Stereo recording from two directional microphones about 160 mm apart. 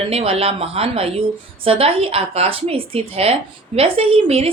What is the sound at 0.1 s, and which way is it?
A woman's voice, 40° right (ahead or behind).